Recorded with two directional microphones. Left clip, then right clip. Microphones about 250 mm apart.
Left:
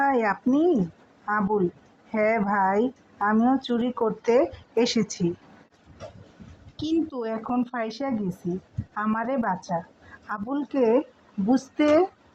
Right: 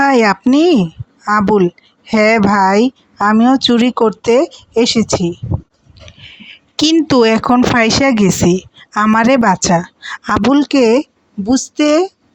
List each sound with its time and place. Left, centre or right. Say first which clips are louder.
0.0 s speech: right 12 dB; right
6.7 s speech: right 17 dB; right